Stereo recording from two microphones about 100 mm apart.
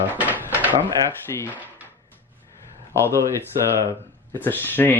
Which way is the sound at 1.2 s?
25° left (ahead or behind).